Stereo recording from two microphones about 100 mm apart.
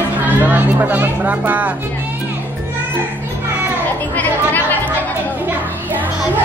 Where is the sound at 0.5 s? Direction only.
15° right (ahead or behind).